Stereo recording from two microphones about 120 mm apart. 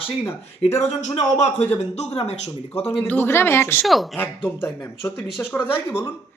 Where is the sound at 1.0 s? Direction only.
65° left (ahead or behind).